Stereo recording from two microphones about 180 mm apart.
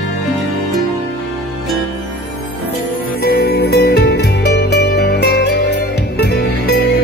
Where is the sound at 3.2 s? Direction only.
60° left (ahead or behind).